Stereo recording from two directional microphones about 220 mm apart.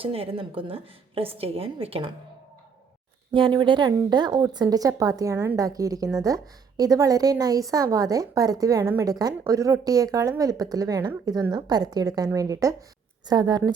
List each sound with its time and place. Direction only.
0.0 s a woman's voice: 25° right (ahead or behind)
3.3 s a woman's voice: 20° right (ahead or behind)